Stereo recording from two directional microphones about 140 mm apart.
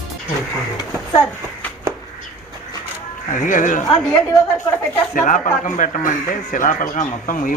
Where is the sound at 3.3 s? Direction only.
65° left (ahead or behind).